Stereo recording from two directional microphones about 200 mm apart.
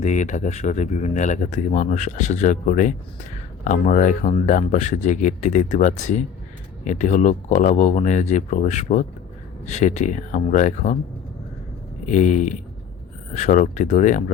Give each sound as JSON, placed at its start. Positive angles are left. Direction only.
{"t": 0.0, "sound": "speech", "side_deg": 35}
{"t": 12.0, "sound": "speech", "side_deg": 40}